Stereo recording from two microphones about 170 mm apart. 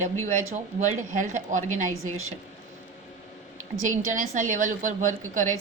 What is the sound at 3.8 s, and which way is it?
A woman's voice, 50° right (ahead or behind).